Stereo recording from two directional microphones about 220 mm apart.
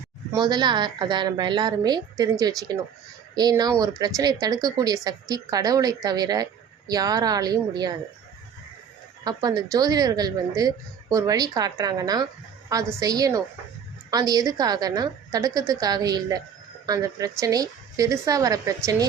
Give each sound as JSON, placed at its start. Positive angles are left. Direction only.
{"t": 0.3, "sound": "a woman's voice", "side_deg": -20}
{"t": 3.3, "sound": "speech", "side_deg": -20}
{"t": 9.2, "sound": "speech", "side_deg": -20}